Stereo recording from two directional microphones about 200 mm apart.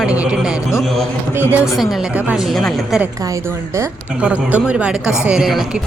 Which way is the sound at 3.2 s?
15° right (ahead or behind).